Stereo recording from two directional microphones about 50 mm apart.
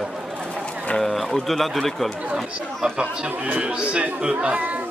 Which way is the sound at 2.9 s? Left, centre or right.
Right.